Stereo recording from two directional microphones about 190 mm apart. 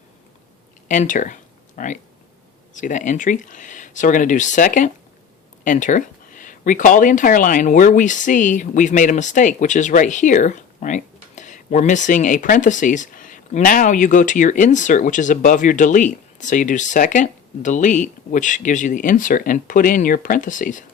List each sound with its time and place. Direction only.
0.9 s speech: 40° left (ahead or behind)